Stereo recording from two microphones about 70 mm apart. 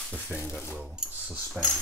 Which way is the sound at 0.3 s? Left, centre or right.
Centre.